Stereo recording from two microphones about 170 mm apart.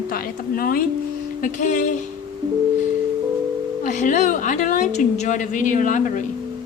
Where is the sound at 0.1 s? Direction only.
60° left (ahead or behind).